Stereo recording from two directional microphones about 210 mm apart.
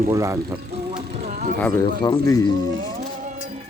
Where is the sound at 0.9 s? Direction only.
25° right (ahead or behind).